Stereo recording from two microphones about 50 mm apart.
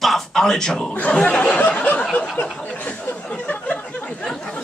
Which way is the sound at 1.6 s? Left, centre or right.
Left.